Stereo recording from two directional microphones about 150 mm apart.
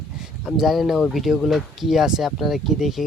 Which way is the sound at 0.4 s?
Centre (ahead or behind).